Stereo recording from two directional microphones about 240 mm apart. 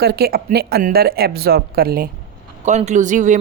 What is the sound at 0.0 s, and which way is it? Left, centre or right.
Speech, right.